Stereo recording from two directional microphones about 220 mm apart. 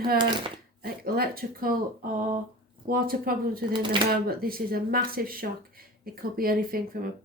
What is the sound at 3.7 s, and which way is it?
Speech, 20° right (ahead or behind).